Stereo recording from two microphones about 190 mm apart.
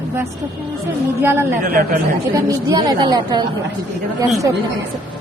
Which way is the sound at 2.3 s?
20° right (ahead or behind).